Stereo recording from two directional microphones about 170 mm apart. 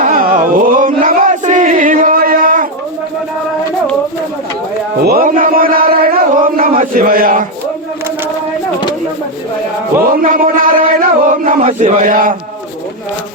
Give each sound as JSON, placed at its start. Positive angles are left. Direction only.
{"t": 0.0, "sound": "chant", "side_deg": -55}
{"t": 5.0, "sound": "a sound", "side_deg": -55}
{"t": 10.0, "sound": "a man's voice", "side_deg": -60}
{"t": 11.2, "sound": "chant", "side_deg": -50}